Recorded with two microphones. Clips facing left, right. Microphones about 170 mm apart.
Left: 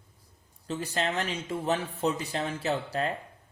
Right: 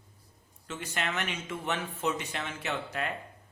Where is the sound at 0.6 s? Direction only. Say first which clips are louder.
Left 5 dB; 35° left (ahead or behind).